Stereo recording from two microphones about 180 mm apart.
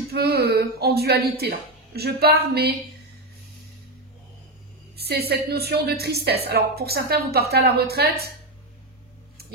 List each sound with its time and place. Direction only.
0.1 s speech: 60° right (ahead or behind)
4.9 s speech: 60° right (ahead or behind)